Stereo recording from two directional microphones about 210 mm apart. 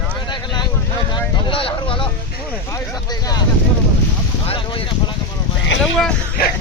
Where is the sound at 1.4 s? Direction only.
25° left (ahead or behind).